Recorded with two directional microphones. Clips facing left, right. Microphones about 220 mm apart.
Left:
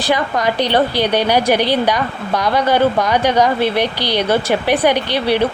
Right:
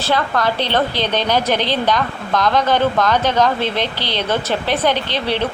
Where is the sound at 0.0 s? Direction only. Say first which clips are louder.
Left 1 dB; 15° left (ahead or behind).